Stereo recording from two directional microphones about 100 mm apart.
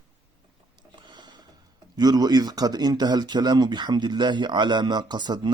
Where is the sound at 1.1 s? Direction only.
45° right (ahead or behind).